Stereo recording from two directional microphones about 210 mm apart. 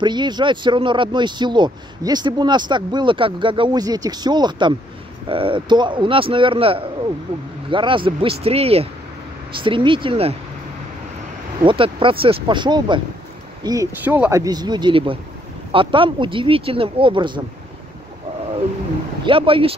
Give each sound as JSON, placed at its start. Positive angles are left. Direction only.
{"t": 0.0, "sound": "speech", "side_deg": -20}
{"t": 11.6, "sound": "speech", "side_deg": -25}
{"t": 19.2, "sound": "speech", "side_deg": -25}